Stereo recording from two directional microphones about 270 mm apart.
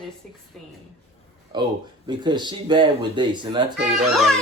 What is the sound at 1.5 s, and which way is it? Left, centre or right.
Speech, centre.